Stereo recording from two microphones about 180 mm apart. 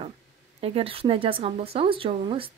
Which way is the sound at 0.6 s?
35° right (ahead or behind).